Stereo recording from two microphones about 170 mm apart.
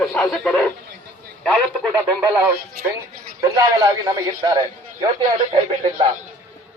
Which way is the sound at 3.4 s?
20° right (ahead or behind).